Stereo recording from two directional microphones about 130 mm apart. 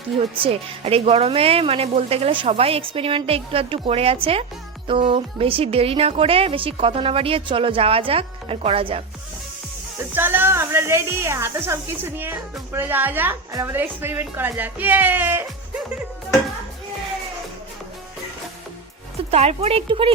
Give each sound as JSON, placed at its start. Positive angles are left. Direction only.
{"t": 0.3, "sound": "speech", "side_deg": -50}
{"t": 10.2, "sound": "a woman's voice", "side_deg": -15}
{"t": 19.3, "sound": "speech", "side_deg": -50}